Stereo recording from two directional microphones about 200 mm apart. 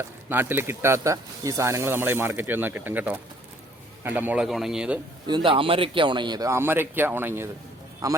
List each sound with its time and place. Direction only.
0.0 s speech: 10° right (ahead or behind)
5.2 s a man's voice: 25° right (ahead or behind)